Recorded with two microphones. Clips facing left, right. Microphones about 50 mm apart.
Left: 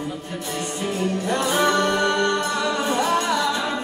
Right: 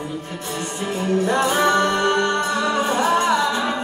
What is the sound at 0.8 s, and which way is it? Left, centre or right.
Music, right.